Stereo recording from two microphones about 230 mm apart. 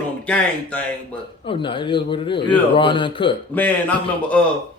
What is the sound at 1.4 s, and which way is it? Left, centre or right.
A man's voice, left.